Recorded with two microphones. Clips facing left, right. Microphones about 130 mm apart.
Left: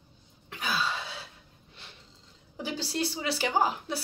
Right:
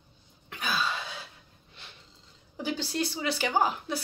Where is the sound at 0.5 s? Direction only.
30° left (ahead or behind).